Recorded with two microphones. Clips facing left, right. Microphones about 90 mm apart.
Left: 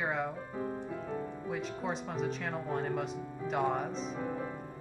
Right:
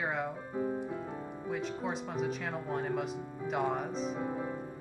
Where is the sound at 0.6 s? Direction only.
15° right (ahead or behind).